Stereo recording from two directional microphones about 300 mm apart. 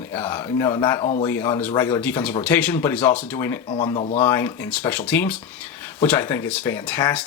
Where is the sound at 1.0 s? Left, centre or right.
Left.